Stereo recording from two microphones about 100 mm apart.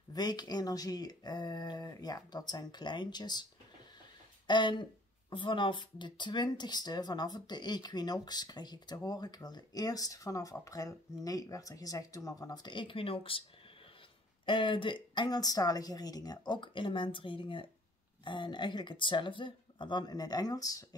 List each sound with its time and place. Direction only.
0.1 s speech: 45° left (ahead or behind)
4.5 s speech: 50° left (ahead or behind)
14.4 s speech: 55° left (ahead or behind); by 20.8 s 35° left (ahead or behind)